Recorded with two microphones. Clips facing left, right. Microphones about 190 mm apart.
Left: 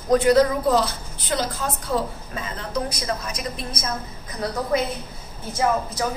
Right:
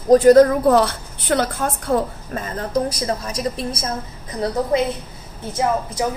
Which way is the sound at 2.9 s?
35° right (ahead or behind).